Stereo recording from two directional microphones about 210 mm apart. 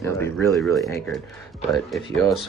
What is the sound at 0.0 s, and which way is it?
Speech, 15° left (ahead or behind).